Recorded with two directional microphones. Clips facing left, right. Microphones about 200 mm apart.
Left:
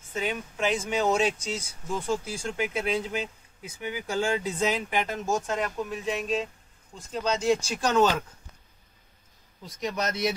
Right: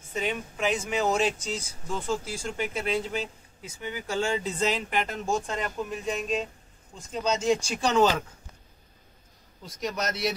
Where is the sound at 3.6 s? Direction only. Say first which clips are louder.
Left 1 dB; 10° left (ahead or behind).